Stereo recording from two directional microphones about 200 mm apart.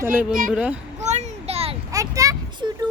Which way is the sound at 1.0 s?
35° right (ahead or behind).